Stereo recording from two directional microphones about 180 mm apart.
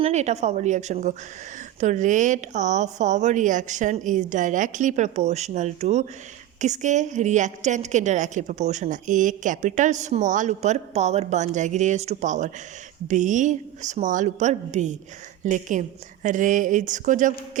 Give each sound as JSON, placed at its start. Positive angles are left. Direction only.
{"t": 0.0, "sound": "a woman's voice", "side_deg": -40}